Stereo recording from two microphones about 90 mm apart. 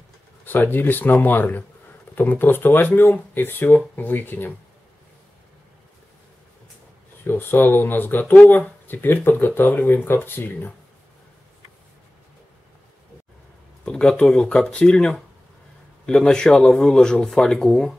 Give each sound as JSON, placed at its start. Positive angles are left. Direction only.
{"t": 0.5, "sound": "speech", "side_deg": 20}
{"t": 7.2, "sound": "speech", "side_deg": 25}
{"t": 13.8, "sound": "speech", "side_deg": 10}